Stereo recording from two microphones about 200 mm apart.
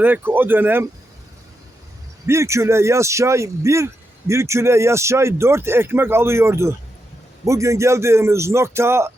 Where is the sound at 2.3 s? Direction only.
15° right (ahead or behind).